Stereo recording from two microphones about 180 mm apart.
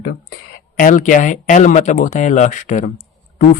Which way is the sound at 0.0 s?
60° left (ahead or behind).